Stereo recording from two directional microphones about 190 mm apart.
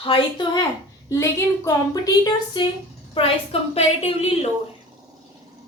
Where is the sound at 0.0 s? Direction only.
25° left (ahead or behind).